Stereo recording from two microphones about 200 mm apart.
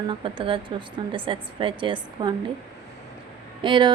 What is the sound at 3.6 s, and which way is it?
Speech, 25° right (ahead or behind).